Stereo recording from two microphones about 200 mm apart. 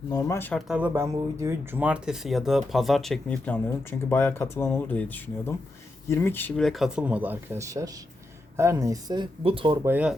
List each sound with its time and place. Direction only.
0.1 s speech: 15° left (ahead or behind)
0.7 s speech: 10° right (ahead or behind); by 9.7 s 25° right (ahead or behind)
9.8 s speech: 5° right (ahead or behind)